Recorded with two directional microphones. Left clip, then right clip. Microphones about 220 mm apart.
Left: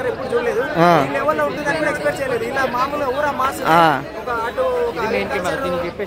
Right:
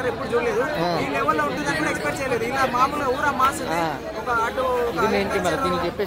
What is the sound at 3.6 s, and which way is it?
Speech, 45° left (ahead or behind).